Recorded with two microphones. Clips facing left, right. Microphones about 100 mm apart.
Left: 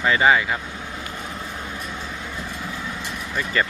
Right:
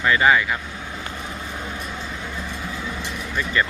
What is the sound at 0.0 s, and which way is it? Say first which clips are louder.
Speech: even; 25° left (ahead or behind).